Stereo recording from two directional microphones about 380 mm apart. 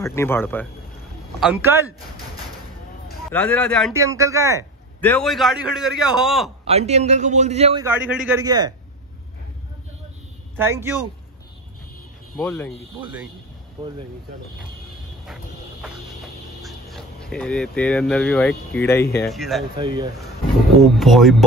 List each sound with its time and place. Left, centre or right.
0.0 s a man's voice: centre
1.4 s a man's voice: centre
3.3 s a man's voice: centre
5.0 s a man's voice: centre
6.7 s a man's voice: centre
10.5 s a man's voice: centre
12.4 s a man's voice: centre
16.6 s a man's voice: centre
19.8 s a man's voice: centre
20.8 s a man's voice: centre